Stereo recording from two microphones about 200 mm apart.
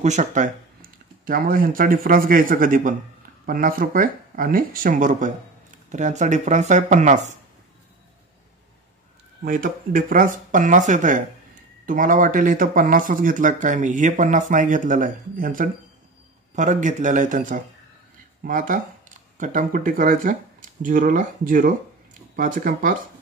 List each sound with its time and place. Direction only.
0.0 s speech: 35° right (ahead or behind)
9.4 s speech: 45° right (ahead or behind)